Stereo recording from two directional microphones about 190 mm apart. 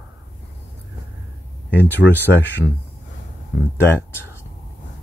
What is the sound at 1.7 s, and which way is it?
Speech, 10° left (ahead or behind).